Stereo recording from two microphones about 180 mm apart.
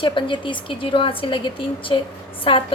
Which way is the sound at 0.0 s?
25° left (ahead or behind).